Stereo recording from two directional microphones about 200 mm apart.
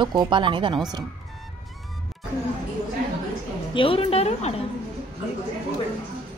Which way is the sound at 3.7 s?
25° left (ahead or behind).